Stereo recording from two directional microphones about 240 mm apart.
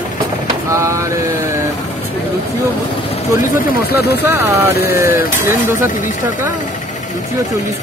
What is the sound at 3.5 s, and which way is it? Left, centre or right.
Speech, left.